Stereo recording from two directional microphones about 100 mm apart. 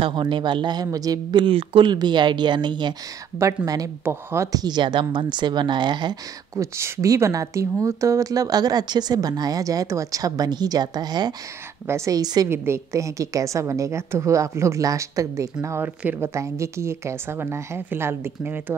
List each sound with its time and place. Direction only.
0.0 s a woman's voice: 55° right (ahead or behind); by 1.4 s 40° right (ahead or behind)
1.4 s speech: 65° right (ahead or behind)
1.9 s a woman's voice: 50° right (ahead or behind)
3.3 s speech: 35° right (ahead or behind)
4.0 s a woman's voice: 25° right (ahead or behind)
4.5 s a woman's voice: 45° right (ahead or behind)
6.5 s speech: 30° right (ahead or behind)
11.9 s speech: 30° right (ahead or behind)
12.4 s speech: 25° right (ahead or behind)
15.8 s a woman's voice: 20° right (ahead or behind)
16.3 s a woman's voice: 30° right (ahead or behind)